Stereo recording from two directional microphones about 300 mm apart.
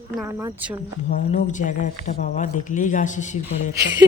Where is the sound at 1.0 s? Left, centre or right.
Left.